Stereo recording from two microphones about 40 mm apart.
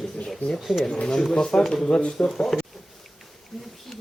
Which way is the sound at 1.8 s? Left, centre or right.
Left.